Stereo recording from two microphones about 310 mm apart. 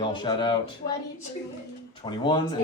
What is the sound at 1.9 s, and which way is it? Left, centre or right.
Speech, centre.